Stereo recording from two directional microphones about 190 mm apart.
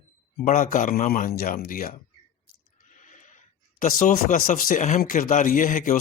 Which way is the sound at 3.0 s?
40° left (ahead or behind).